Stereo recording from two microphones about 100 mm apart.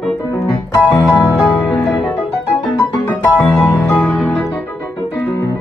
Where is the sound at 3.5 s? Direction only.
5° left (ahead or behind).